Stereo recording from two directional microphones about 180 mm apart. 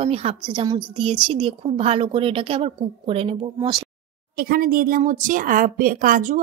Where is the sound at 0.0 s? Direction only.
35° right (ahead or behind).